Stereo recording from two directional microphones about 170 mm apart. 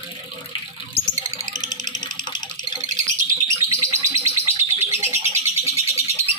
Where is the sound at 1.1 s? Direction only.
45° right (ahead or behind).